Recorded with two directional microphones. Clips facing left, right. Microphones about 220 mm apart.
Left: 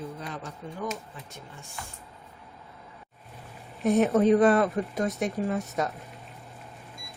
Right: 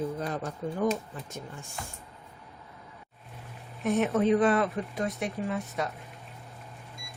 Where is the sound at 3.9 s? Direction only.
35° left (ahead or behind).